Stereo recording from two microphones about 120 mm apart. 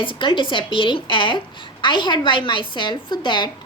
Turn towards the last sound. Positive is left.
turn(degrees=40)  # may be behind; listen again after turning